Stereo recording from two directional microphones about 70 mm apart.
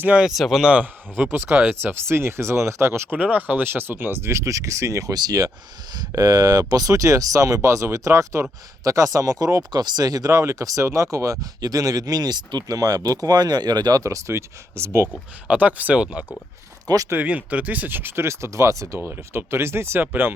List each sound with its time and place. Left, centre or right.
0.0 s speech: centre
0.3 s speech: centre
0.6 s speech: centre
1.1 s speech: right
3.1 s speech: right
5.1 s speech: right
9.7 s speech: right
14.0 s speech: right
15.4 s speech: right
16.8 s speech: right
17.2 s speech: centre; by 18.9 s right
18.9 s speech: right